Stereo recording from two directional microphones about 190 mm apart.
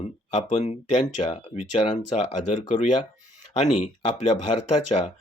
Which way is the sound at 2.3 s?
40° left (ahead or behind).